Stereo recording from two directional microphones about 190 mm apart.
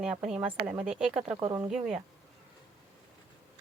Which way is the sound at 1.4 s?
20° right (ahead or behind).